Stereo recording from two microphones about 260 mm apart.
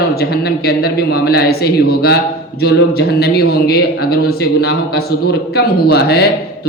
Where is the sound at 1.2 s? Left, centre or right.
Left.